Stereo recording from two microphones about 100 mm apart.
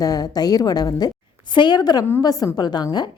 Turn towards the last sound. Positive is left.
turn(degrees=45)  # may be behind; listen again after turning